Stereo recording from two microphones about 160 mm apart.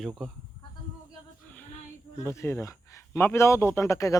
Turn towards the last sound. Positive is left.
turn(degrees=20)  # may be behind; listen again after turning